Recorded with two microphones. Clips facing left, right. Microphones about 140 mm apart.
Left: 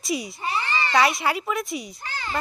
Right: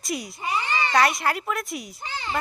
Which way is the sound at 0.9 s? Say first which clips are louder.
Left 1 dB; centre (ahead or behind).